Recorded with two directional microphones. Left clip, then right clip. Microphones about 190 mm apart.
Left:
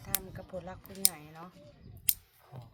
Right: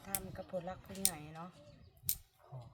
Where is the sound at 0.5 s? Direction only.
10° left (ahead or behind).